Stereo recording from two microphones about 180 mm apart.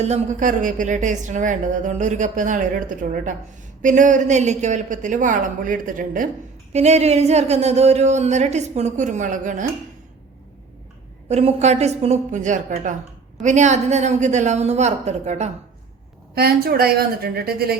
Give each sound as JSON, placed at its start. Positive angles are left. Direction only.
{"t": 0.0, "sound": "a woman's voice", "side_deg": -40}
{"t": 11.3, "sound": "speech", "side_deg": -35}
{"t": 16.3, "sound": "a woman's voice", "side_deg": -60}